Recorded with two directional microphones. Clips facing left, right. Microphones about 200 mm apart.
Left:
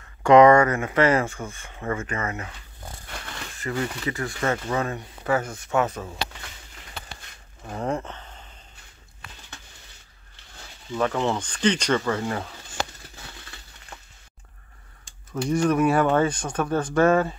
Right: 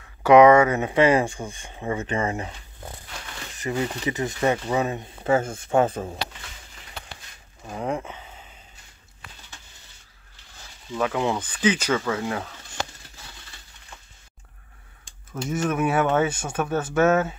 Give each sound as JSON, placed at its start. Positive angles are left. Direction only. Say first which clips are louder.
{"t": 0.2, "sound": "speech", "louder": "right 1 dB", "side_deg": -5}
{"t": 3.5, "sound": "speech", "louder": "right 2 dB", "side_deg": -20}
{"t": 7.6, "sound": "a sound", "louder": "even", "side_deg": -5}
{"t": 11.0, "sound": "speech", "louder": "even", "side_deg": -5}
{"t": 15.0, "sound": "speech", "louder": "left 4 dB", "side_deg": -5}